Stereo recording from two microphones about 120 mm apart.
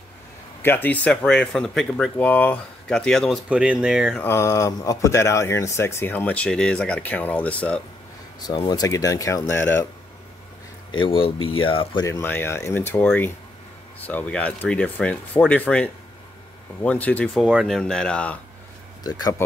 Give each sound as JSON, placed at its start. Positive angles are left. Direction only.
{"t": 0.6, "sound": "speech", "side_deg": 15}
{"t": 3.4, "sound": "speech", "side_deg": -10}
{"t": 4.2, "sound": "speech", "side_deg": 20}
{"t": 8.6, "sound": "speech", "side_deg": 30}
{"t": 11.0, "sound": "speech", "side_deg": 50}
{"t": 12.2, "sound": "speech", "side_deg": 15}
{"t": 19.0, "sound": "speech", "side_deg": 35}